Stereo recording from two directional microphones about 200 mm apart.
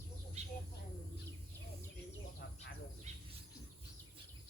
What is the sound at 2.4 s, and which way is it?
Insect, 55° left (ahead or behind).